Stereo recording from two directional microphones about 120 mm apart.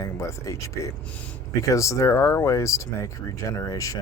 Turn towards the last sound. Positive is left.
turn(degrees=30)  # may be behind; listen again after turning